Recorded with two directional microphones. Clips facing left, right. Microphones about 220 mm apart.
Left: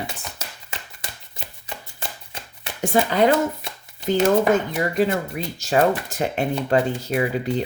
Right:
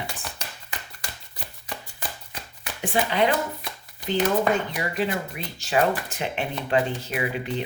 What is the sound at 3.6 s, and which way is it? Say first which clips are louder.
Shuffling cards: left 1 dB; 25° left (ahead or behind).